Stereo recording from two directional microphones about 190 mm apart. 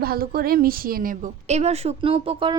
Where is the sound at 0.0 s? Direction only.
50° right (ahead or behind).